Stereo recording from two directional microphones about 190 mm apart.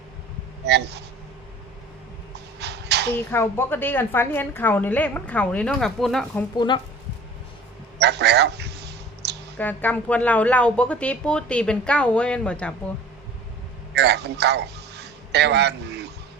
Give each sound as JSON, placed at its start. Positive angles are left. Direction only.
{"t": 0.6, "sound": "speech", "side_deg": -60}
{"t": 2.6, "sound": "a sound", "side_deg": -60}
{"t": 3.3, "sound": "a woman's voice", "side_deg": 10}
{"t": 6.6, "sound": "speech", "side_deg": 25}
{"t": 7.9, "sound": "a sound", "side_deg": -60}
{"t": 9.6, "sound": "a woman's voice", "side_deg": 10}
{"t": 13.9, "sound": "a man's voice", "side_deg": -60}